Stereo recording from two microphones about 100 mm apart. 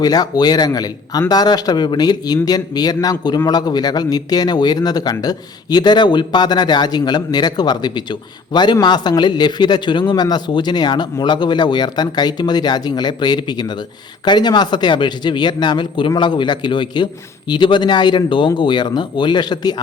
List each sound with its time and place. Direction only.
0.0 s a man's voice: 40° left (ahead or behind)